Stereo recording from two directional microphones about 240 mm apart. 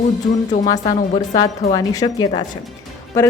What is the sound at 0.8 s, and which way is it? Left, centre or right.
Speech, left.